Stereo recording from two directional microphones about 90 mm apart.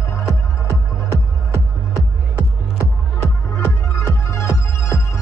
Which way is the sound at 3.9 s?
35° left (ahead or behind).